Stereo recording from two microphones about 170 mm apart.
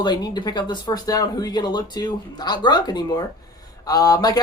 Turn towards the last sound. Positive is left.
turn(degrees=20)  # may be behind; listen again after turning